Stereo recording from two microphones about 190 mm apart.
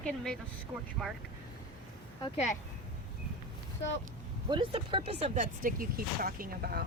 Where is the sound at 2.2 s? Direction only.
35° left (ahead or behind).